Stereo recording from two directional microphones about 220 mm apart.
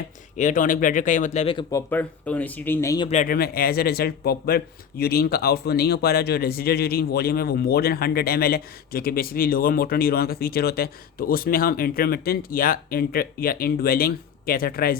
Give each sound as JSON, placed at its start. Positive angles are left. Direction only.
{"t": 0.3, "sound": "speech", "side_deg": 35}
{"t": 1.7, "sound": "speech", "side_deg": 10}
{"t": 3.1, "sound": "speech", "side_deg": 35}